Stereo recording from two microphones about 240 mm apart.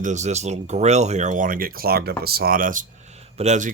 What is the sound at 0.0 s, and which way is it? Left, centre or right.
Speech, right.